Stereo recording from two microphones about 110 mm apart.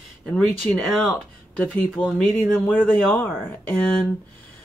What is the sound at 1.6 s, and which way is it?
Speech, 15° left (ahead or behind).